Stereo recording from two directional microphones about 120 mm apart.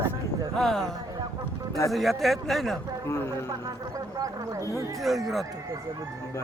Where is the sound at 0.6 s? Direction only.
5° left (ahead or behind).